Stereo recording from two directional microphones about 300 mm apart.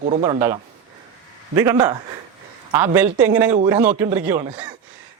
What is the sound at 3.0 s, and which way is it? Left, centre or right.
Speech, centre.